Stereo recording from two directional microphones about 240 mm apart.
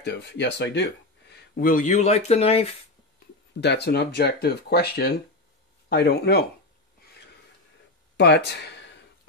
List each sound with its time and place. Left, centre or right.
0.0 s speech: left
3.6 s speech: left
8.2 s speech: left